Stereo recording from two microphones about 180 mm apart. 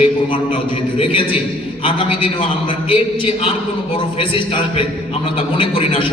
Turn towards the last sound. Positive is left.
turn(degrees=30)  # may be behind; listen again after turning